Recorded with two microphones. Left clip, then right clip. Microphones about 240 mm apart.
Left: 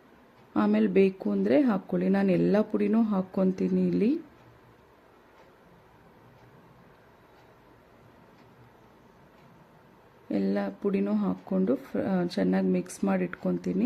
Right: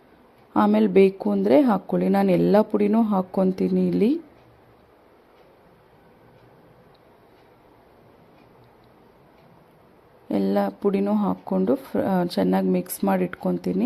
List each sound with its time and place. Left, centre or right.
0.5 s speech: centre
10.2 s speech: centre